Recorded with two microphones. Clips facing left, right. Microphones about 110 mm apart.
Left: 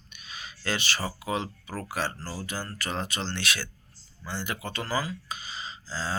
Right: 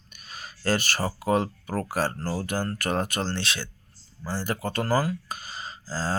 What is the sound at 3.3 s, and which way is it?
Speech, 25° right (ahead or behind).